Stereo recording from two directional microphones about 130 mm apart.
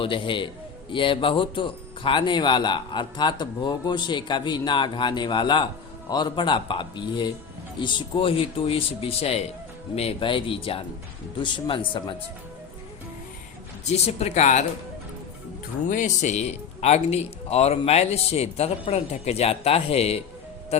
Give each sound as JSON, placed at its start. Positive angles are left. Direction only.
{"t": 0.0, "sound": "speech", "side_deg": 40}
{"t": 13.8, "sound": "speech", "side_deg": 55}
{"t": 15.9, "sound": "speech", "side_deg": 75}